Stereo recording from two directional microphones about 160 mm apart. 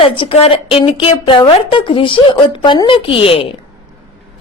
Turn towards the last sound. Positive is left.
turn(degrees=35)  # may be behind; listen again after turning